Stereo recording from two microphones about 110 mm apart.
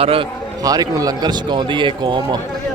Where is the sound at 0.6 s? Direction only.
35° right (ahead or behind).